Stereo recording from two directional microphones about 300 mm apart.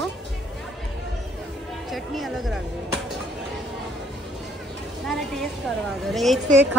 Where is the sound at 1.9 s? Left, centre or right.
Centre.